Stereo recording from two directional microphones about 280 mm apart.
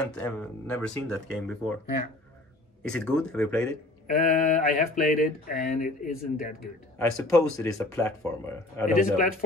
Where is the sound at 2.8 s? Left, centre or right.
Centre.